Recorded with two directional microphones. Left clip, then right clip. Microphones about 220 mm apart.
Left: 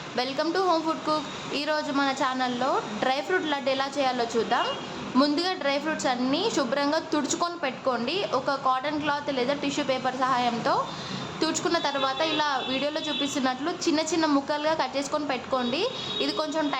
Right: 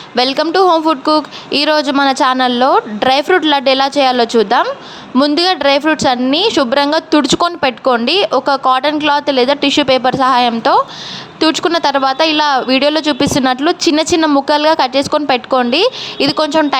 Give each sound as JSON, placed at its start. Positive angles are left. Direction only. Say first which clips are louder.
{"t": 0.2, "sound": "a woman's voice", "louder": "right 15 dB", "side_deg": -45}